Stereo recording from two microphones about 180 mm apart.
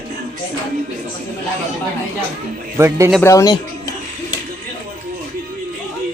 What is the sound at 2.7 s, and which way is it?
Speech, 15° right (ahead or behind).